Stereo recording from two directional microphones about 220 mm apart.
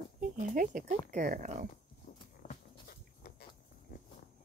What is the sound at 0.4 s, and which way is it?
Speech, 35° right (ahead or behind).